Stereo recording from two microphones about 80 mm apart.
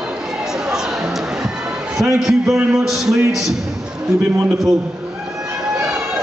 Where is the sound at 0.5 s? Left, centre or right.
Centre.